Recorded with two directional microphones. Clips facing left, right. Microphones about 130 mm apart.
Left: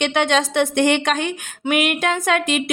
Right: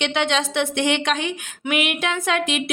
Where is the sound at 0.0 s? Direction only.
50° left (ahead or behind).